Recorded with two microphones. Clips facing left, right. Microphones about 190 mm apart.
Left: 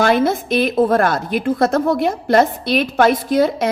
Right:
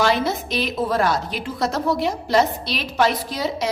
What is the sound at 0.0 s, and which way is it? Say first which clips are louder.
A woman's voice: left 5 dB; 55° left (ahead or behind).